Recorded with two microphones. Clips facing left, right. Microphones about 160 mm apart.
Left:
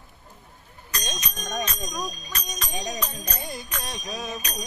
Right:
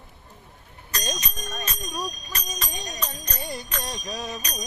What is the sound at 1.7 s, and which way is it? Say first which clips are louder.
Speech: even; 5° right (ahead or behind).